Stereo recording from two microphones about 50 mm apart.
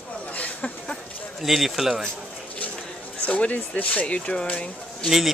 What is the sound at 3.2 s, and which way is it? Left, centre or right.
Speech, left.